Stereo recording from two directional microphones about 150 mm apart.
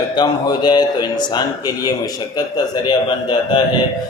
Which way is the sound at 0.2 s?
25° left (ahead or behind).